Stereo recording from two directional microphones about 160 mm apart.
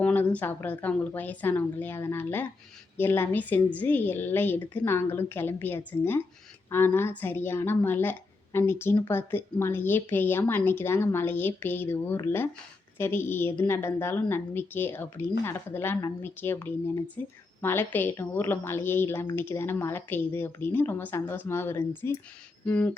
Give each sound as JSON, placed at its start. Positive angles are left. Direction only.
{"t": 0.0, "sound": "a woman's voice", "side_deg": 10}